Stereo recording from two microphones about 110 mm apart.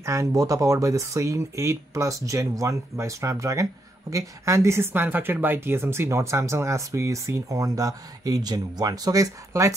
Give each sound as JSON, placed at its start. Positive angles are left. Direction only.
{"t": 0.0, "sound": "speech", "side_deg": -30}